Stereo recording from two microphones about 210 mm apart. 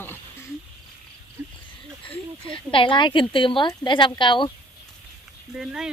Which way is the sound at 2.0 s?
25° left (ahead or behind).